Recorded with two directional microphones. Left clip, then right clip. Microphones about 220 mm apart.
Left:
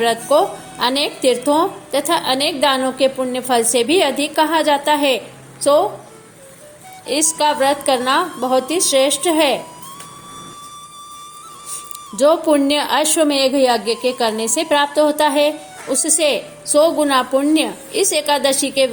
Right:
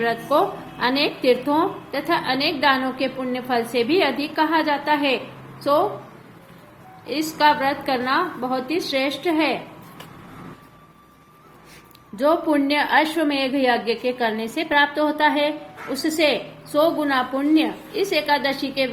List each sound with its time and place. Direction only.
0.0 s a woman's voice: 30° left (ahead or behind)
7.1 s a woman's voice: 30° left (ahead or behind)
12.1 s a woman's voice: 30° left (ahead or behind)